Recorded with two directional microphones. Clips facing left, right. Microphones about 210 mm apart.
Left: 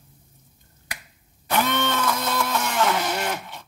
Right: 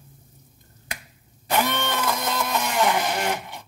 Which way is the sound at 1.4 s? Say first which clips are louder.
Left 1 dB; 15° right (ahead or behind).